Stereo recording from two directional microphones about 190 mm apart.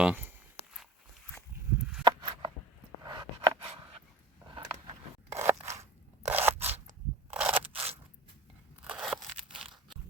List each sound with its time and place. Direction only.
0.0 s speech: 10° right (ahead or behind)
2.0 s a sound: 20° right (ahead or behind)
5.3 s scissors: 15° right (ahead or behind)
7.7 s biting: 30° right (ahead or behind)
8.8 s crunch: 5° right (ahead or behind)